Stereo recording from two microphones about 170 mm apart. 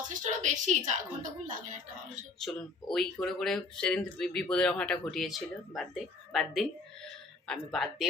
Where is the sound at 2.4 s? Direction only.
Centre (ahead or behind).